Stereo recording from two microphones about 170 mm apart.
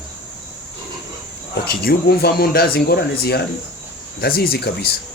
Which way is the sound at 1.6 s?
70° left (ahead or behind).